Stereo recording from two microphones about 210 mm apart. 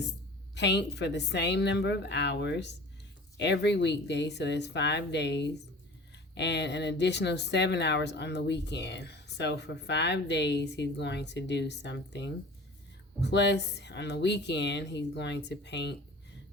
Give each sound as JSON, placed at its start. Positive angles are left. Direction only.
{"t": 0.5, "sound": "speech", "side_deg": 55}